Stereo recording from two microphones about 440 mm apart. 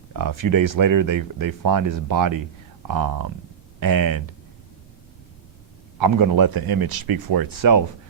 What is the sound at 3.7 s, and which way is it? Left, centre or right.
Speech, right.